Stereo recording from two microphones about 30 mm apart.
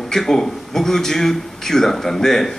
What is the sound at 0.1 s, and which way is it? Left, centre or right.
A man's voice, centre.